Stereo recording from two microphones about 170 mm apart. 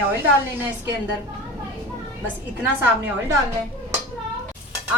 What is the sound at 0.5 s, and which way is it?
Speech, 15° right (ahead or behind).